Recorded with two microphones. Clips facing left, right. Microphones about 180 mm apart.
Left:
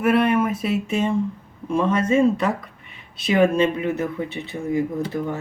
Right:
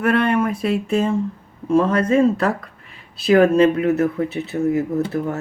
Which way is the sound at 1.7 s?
35° right (ahead or behind).